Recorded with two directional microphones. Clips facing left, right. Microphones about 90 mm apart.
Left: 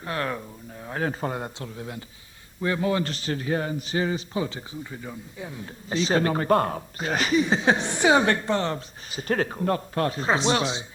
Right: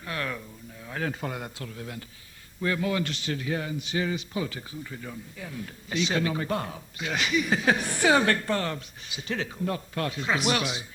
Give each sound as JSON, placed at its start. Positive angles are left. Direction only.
{"t": 0.0, "sound": "a man's voice", "side_deg": 35}
{"t": 8.7, "sound": "a man's voice", "side_deg": 40}